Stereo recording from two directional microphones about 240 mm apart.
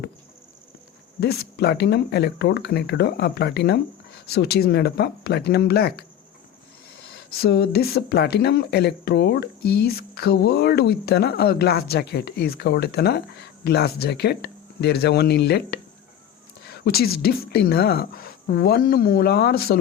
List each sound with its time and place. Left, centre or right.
1.2 s speech: left
16.6 s a sound: left
17.2 s speech: left